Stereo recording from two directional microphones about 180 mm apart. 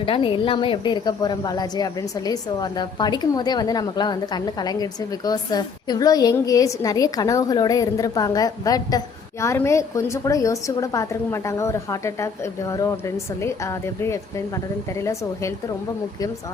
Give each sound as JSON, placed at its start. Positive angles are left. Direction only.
{"t": 0.0, "sound": "a woman's voice", "side_deg": 30}